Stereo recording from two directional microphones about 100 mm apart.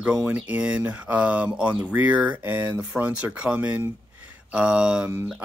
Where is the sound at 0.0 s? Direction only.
10° right (ahead or behind).